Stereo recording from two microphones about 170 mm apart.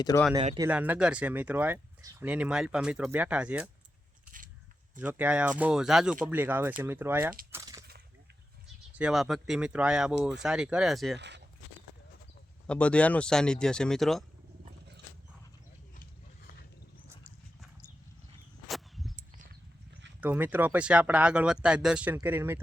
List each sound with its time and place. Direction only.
0.1 s speech: 20° left (ahead or behind)
0.7 s speech: 10° right (ahead or behind)
2.2 s speech: 5° right (ahead or behind)
4.9 s speech: 10° right (ahead or behind)
7.5 s a sound: 20° right (ahead or behind)
9.0 s speech: 5° right (ahead or behind)
11.2 s speech: 90° right
12.6 s speech: 5° left (ahead or behind)
17.6 s horse: 5° right (ahead or behind)
18.7 s a sound: centre (ahead or behind)
20.2 s speech: 10° right (ahead or behind)